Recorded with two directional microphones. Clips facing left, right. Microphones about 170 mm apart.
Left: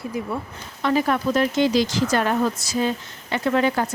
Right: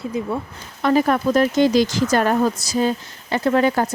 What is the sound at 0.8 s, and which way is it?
Speech, 45° right (ahead or behind).